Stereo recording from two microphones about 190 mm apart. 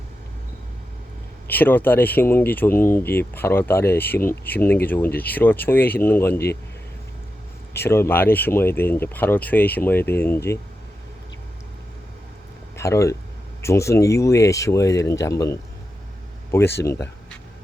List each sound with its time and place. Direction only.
1.5 s speech: 10° left (ahead or behind)
7.7 s speech: 10° left (ahead or behind)
12.7 s speech: 15° left (ahead or behind)